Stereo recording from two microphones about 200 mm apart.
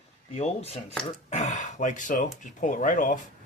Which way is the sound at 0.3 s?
30° left (ahead or behind).